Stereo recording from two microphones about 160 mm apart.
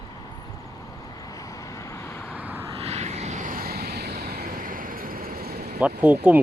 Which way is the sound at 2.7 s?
40° right (ahead or behind).